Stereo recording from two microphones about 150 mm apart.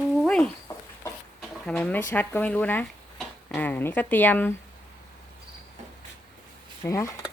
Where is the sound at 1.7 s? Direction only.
10° left (ahead or behind).